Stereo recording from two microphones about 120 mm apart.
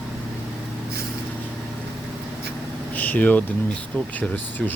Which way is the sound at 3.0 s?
15° left (ahead or behind).